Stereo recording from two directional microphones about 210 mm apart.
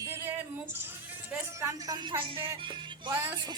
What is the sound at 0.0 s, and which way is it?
Music, 10° right (ahead or behind).